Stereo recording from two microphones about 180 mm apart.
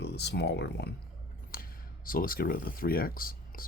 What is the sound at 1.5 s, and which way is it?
Speech, 55° left (ahead or behind).